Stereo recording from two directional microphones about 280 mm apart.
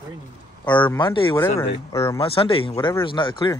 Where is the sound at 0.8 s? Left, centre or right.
Centre.